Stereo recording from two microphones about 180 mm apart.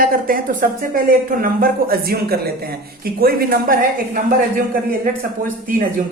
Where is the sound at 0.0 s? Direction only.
50° right (ahead or behind).